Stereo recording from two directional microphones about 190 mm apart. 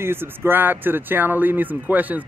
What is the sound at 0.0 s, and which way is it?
Speech, 10° right (ahead or behind).